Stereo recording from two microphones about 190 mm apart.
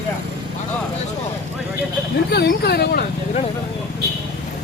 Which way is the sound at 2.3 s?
60° left (ahead or behind).